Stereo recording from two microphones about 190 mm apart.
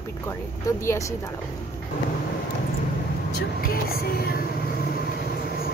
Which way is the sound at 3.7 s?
55° left (ahead or behind).